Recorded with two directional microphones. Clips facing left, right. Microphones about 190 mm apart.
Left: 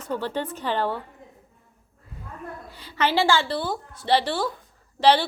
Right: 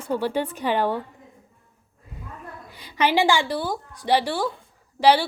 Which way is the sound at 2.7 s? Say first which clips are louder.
Right 2 dB; 15° right (ahead or behind).